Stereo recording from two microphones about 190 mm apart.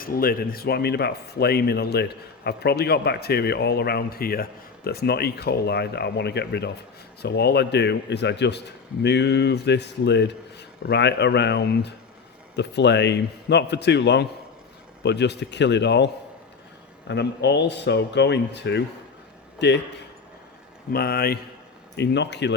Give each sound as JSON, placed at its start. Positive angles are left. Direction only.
{"t": 0.0, "sound": "speech", "side_deg": 50}
{"t": 17.1, "sound": "a man's voice", "side_deg": 65}
{"t": 20.9, "sound": "a man's voice", "side_deg": 55}
{"t": 21.9, "sound": "speech", "side_deg": 65}